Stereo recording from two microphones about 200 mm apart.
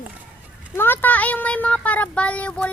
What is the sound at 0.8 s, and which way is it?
Speech, 10° left (ahead or behind).